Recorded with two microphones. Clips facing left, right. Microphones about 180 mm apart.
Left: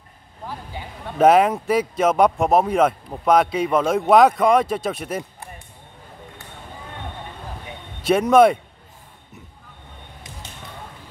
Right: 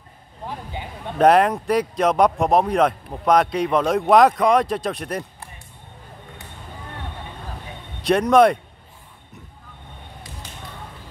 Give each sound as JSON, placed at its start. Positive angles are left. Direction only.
{"t": 1.1, "sound": "speech", "side_deg": 0}
{"t": 8.0, "sound": "speech", "side_deg": 5}